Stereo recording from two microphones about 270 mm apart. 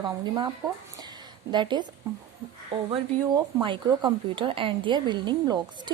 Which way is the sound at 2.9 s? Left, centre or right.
Centre.